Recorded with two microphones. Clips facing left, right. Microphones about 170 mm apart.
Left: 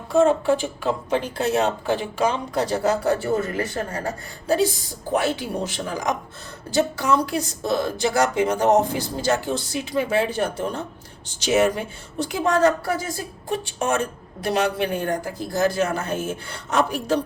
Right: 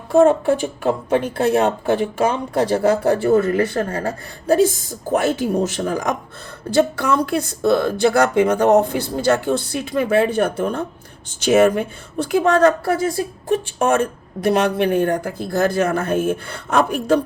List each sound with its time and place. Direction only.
0.1 s speech: 55° right (ahead or behind)